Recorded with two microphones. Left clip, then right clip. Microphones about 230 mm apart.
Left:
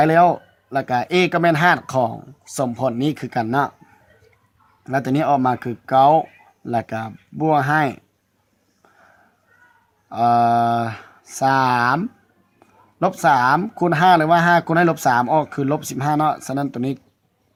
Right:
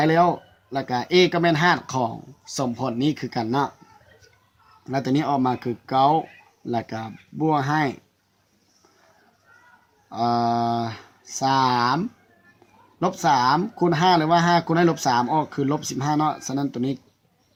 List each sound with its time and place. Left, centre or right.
0.0 s speech: left
4.8 s speech: left
10.1 s speech: left